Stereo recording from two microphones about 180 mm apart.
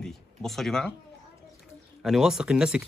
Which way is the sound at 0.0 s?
Centre (ahead or behind).